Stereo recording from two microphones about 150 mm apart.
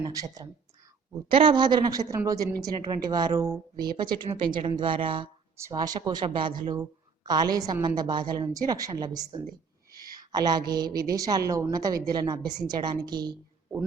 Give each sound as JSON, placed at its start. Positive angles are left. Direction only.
{"t": 0.0, "sound": "a woman's voice", "side_deg": -25}
{"t": 1.3, "sound": "a woman's voice", "side_deg": -35}
{"t": 5.5, "sound": "a woman's voice", "side_deg": -20}
{"t": 9.9, "sound": "a sound", "side_deg": -25}
{"t": 10.9, "sound": "a woman's voice", "side_deg": -25}